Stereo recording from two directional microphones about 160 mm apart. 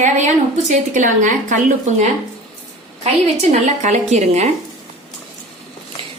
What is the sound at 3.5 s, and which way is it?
Speech, 45° right (ahead or behind).